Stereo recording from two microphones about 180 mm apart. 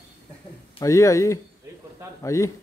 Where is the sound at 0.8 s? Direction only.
15° left (ahead or behind).